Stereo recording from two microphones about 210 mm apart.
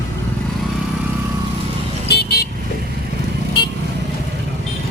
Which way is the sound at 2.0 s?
50° left (ahead or behind).